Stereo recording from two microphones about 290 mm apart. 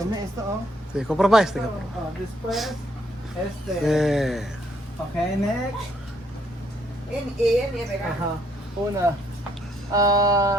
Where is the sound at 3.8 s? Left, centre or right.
Centre.